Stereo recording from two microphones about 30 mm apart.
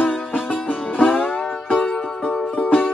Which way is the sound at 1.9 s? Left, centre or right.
Left.